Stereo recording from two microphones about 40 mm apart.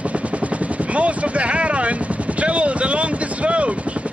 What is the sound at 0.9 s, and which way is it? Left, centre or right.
Speech, right.